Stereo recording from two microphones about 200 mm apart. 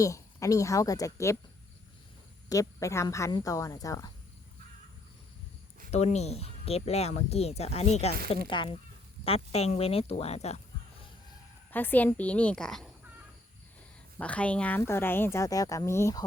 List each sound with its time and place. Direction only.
0.0 s a woman's voice: 15° left (ahead or behind)
2.5 s a woman's voice: 15° left (ahead or behind)
5.9 s speech: 35° left (ahead or behind)
11.7 s a woman's voice: 10° left (ahead or behind)
14.2 s a woman's voice: 5° left (ahead or behind)